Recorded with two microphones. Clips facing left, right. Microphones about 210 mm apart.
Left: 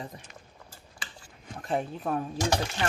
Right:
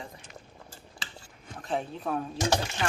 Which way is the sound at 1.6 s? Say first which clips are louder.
Left 2 dB; 5° left (ahead or behind).